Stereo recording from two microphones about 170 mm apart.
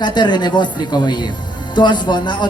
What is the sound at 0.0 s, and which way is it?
A man's voice, 25° left (ahead or behind).